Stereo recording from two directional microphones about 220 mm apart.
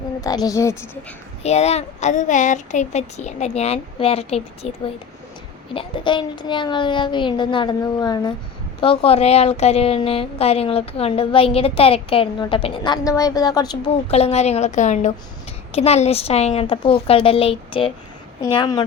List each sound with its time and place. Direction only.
0.2 s a woman's voice: 15° left (ahead or behind)
1.4 s a woman's voice: 30° left (ahead or behind)
5.7 s a woman's voice: 20° left (ahead or behind)
14.1 s a woman's voice: 30° left (ahead or behind)